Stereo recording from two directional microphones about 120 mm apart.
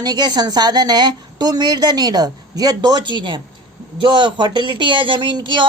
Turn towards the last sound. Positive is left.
turn(degrees=-40)  # may be behind; listen again after turning